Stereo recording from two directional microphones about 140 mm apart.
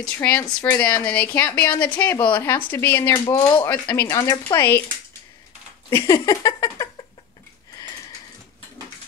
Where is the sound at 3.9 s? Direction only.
20° left (ahead or behind).